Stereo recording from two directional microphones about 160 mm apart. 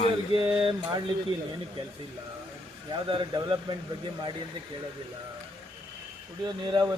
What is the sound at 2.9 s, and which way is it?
Speech, 30° right (ahead or behind).